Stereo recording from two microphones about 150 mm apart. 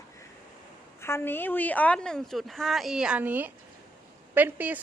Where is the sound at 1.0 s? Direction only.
15° left (ahead or behind).